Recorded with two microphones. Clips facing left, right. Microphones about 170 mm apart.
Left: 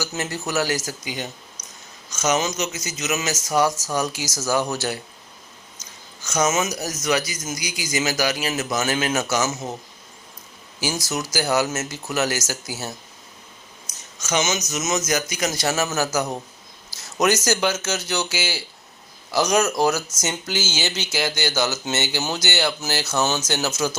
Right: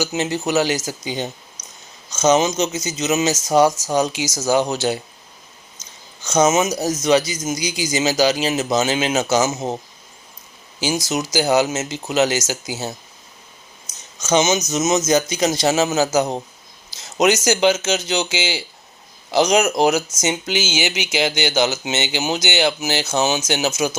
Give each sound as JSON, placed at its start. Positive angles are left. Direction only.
{"t": 0.0, "sound": "speech", "side_deg": -20}
{"t": 6.2, "sound": "speech", "side_deg": -25}
{"t": 10.8, "sound": "speech", "side_deg": -20}
{"t": 14.2, "sound": "speech", "side_deg": -25}